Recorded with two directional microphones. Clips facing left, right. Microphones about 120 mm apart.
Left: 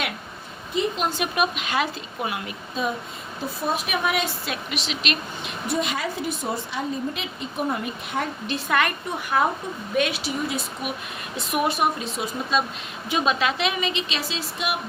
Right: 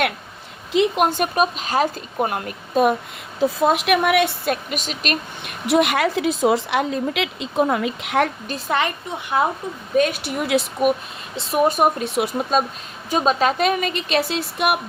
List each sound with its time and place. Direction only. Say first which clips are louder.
0.7 s a woman's voice: right 7 dB; 70° right (ahead or behind); by 1.3 s 55° right (ahead or behind)
1.4 s speech: right 4 dB; 35° right (ahead or behind)
3.4 s a woman's voice: right 9 dB; 90° right; by 5.5 s 45° right (ahead or behind)
5.6 s speech: right 9 dB; 75° right (ahead or behind)
8.7 s speech: right 2 dB; 25° right (ahead or behind)
10.0 s a woman's voice: right 4 dB; 55° right (ahead or behind); by 10.6 s 75° right (ahead or behind)
10.8 s speech: right 14 dB; 50° right (ahead or behind)
11.3 s speech: right 5 dB; 35° right (ahead or behind)
12.0 s speech: right 7 dB; 65° right (ahead or behind)
12.5 s speech: right 4 dB; 45° right (ahead or behind)